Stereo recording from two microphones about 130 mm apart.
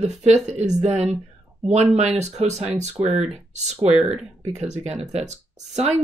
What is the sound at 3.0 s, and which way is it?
Speech, 25° right (ahead or behind).